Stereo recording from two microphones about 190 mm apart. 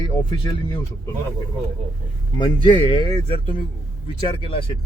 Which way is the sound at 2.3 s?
25° left (ahead or behind).